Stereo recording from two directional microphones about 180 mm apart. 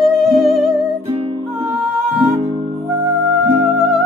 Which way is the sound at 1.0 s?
30° right (ahead or behind).